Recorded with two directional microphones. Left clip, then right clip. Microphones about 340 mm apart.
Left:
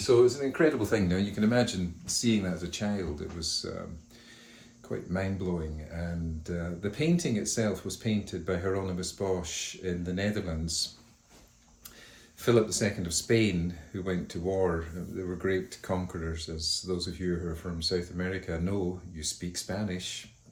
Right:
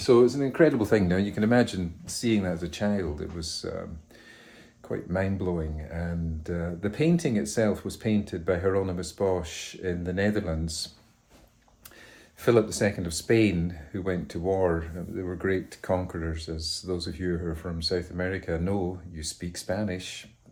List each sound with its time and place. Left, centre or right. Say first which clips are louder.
0.0 s speech: right 2 dB; right
4.9 s speech: right 4 dB; right
12.4 s speech: right 3 dB; right